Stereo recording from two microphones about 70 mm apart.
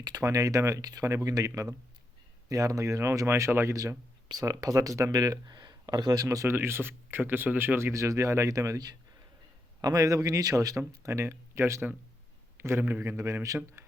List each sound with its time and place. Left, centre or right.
0.2 s speech: right
4.3 s speech: right
5.5 s a sound: right
6.5 s speech: right
7.8 s speech: right
9.8 s speech: right
10.8 s speech: right
12.5 s a sound: right
12.9 s speech: right
13.8 s a sound: right